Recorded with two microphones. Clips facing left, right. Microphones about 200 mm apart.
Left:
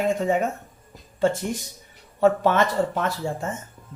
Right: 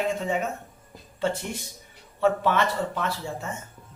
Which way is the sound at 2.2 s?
45° left (ahead or behind).